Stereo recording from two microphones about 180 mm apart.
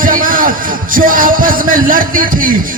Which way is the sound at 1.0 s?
50° right (ahead or behind).